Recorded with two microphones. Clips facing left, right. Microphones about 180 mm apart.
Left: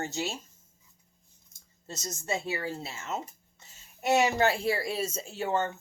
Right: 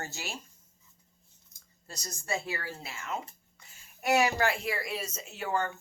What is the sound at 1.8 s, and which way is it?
A woman's voice, 20° left (ahead or behind).